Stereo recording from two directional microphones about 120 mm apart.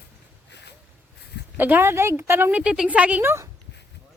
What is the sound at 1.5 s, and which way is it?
A woman's voice, 15° right (ahead or behind).